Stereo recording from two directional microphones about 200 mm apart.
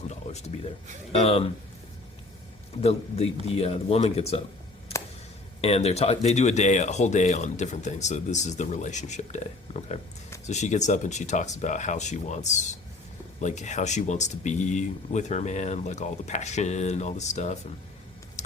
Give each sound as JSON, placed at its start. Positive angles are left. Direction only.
{"t": 0.1, "sound": "a sound", "side_deg": 35}
{"t": 1.1, "sound": "speech", "side_deg": 30}
{"t": 3.6, "sound": "speech", "side_deg": 30}
{"t": 5.5, "sound": "speech", "side_deg": 30}
{"t": 18.4, "sound": "typing", "side_deg": 35}